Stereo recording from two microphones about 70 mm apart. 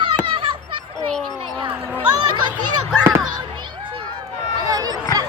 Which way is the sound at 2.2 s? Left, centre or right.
Right.